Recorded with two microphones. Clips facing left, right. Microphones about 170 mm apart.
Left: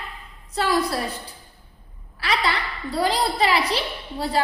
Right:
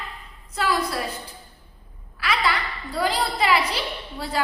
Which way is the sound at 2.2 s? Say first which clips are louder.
Left 1 dB; 35° left (ahead or behind).